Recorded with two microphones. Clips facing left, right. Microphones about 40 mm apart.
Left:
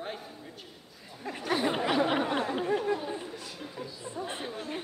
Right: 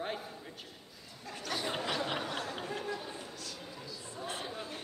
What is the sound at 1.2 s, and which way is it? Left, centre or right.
Speech, left.